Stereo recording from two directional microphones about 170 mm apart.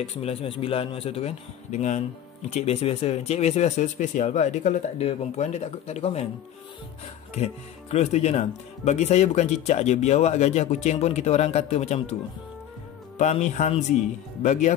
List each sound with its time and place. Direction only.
0.0 s speech: 35° left (ahead or behind)
7.9 s speech: 40° left (ahead or behind)
13.2 s speech: 45° left (ahead or behind)